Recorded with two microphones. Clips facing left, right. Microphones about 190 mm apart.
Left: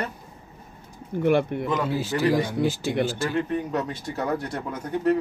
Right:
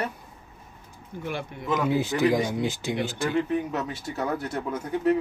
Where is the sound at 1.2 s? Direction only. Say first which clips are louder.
Left 12 dB; 60° left (ahead or behind).